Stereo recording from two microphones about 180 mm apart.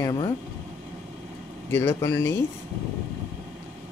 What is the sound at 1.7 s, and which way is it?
Speech, 15° left (ahead or behind).